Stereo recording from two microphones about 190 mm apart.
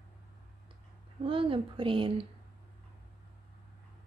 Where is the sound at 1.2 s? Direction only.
30° right (ahead or behind).